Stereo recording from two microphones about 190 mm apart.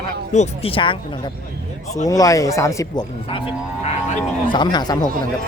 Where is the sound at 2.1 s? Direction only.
20° left (ahead or behind).